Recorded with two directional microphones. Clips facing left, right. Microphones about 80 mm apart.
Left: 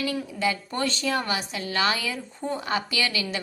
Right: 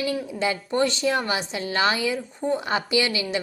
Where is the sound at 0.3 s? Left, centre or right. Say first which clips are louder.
Right 5 dB; right.